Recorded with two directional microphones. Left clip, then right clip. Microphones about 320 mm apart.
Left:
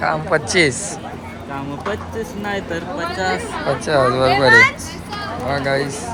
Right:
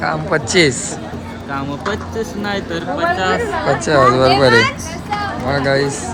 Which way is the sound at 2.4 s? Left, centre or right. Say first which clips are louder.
Right 1 dB; centre.